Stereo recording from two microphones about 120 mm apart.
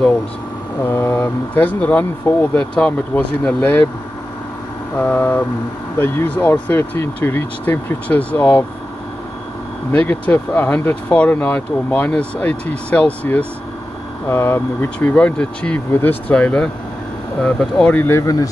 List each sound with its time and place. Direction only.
0.8 s speech: 20° left (ahead or behind)
4.9 s speech: 15° left (ahead or behind)
9.9 s speech: 15° left (ahead or behind); by 18.5 s 30° left (ahead or behind)